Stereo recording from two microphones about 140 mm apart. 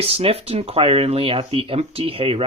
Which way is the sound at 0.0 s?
45° right (ahead or behind).